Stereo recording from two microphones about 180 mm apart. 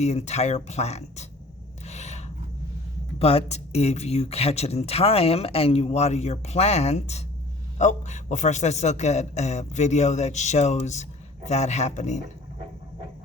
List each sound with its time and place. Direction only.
0.0 s speech: 40° left (ahead or behind)
1.8 s filing: 40° left (ahead or behind)
3.2 s speech: 35° left (ahead or behind)